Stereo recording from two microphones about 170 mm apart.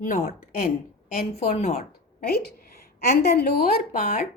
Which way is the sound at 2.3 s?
70° left (ahead or behind).